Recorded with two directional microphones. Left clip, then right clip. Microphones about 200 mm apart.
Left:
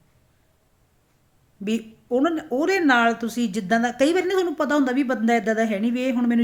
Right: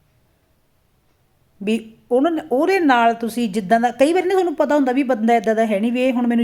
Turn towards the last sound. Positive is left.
turn(degrees=10)  # may be behind; listen again after turning